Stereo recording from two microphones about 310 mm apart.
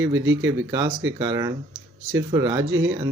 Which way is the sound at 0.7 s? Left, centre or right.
Centre.